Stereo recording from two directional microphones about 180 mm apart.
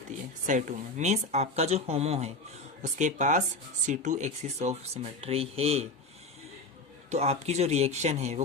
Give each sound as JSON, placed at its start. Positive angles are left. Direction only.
{"t": 0.4, "sound": "speech", "side_deg": -45}
{"t": 7.1, "sound": "speech", "side_deg": -35}